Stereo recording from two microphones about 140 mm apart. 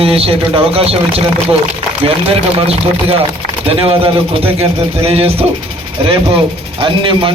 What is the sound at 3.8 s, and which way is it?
A man's voice, 40° right (ahead or behind).